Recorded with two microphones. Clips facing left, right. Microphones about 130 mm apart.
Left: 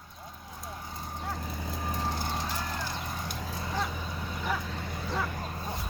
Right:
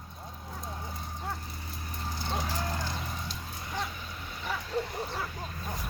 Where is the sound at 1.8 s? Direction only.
90° left.